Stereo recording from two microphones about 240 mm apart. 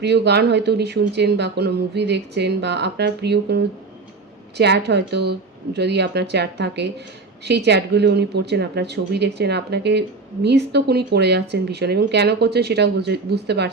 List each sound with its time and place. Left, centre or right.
0.0 s speech: right